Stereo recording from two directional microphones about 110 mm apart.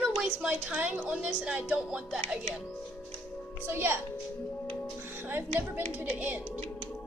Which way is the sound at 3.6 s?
20° right (ahead or behind).